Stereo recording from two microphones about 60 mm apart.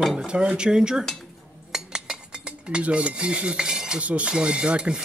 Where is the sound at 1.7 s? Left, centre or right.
Centre.